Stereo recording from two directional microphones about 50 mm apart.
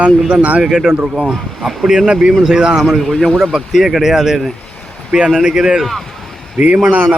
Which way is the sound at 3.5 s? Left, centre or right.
Centre.